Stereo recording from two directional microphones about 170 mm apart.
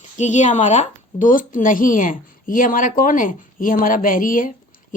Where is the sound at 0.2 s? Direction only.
45° left (ahead or behind).